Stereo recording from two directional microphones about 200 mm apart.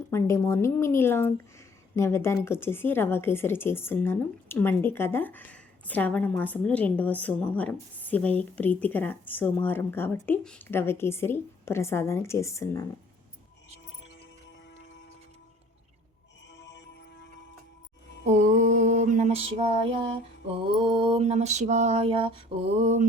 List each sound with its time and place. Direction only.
0.1 s a woman's voice: 15° left (ahead or behind)
16.6 s music: 60° left (ahead or behind)
18.3 s female singing: 40° right (ahead or behind)
20.5 s mantra: 25° right (ahead or behind)